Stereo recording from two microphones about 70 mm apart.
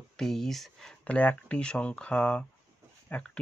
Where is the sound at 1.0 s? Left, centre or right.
Centre.